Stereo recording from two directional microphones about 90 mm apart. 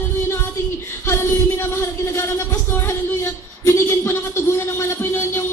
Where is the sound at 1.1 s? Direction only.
30° left (ahead or behind).